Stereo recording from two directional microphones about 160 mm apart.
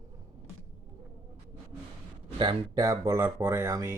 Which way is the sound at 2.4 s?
30° right (ahead or behind).